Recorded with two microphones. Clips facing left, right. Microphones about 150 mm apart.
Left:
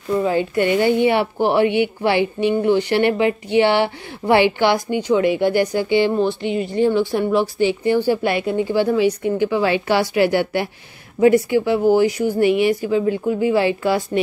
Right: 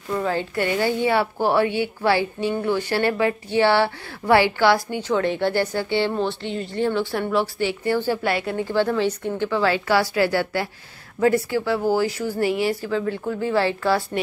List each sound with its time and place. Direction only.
0.2 s a woman's voice: 15° left (ahead or behind)